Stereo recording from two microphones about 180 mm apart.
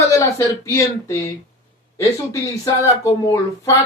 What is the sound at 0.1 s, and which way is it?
Speech, 15° left (ahead or behind).